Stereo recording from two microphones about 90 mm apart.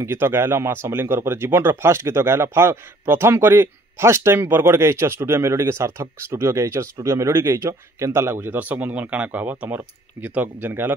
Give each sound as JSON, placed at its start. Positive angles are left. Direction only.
{"t": 0.0, "sound": "speech", "side_deg": -30}